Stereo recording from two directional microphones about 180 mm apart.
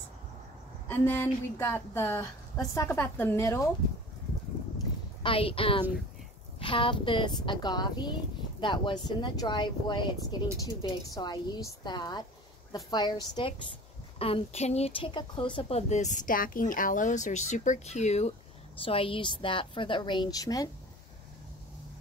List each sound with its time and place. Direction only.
0.8 s a woman's voice: 10° left (ahead or behind)
5.2 s speech: 30° left (ahead or behind)
15.5 s speech: 40° left (ahead or behind); by 20.7 s 20° left (ahead or behind)